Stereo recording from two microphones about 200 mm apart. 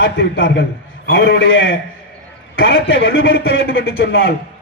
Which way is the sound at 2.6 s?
50° left (ahead or behind).